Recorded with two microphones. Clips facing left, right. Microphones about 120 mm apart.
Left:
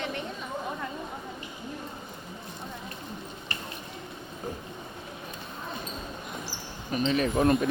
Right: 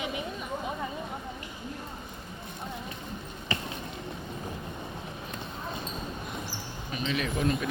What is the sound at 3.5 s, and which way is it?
Drip, 90° right.